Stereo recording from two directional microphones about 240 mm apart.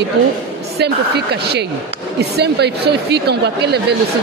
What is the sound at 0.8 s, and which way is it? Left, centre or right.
A woman's voice, right.